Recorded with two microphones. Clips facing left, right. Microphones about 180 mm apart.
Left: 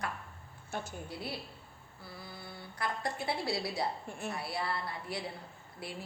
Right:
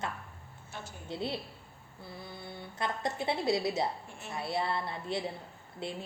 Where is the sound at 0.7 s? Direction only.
50° left (ahead or behind).